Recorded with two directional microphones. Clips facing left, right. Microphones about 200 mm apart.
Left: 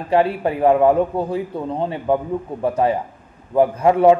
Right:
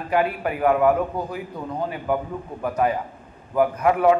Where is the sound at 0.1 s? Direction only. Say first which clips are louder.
Left 5 dB; 30° left (ahead or behind).